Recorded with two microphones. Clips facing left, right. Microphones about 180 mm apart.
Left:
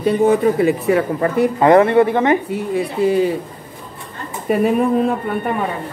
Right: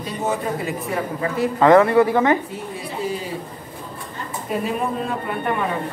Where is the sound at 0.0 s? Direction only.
60° left (ahead or behind).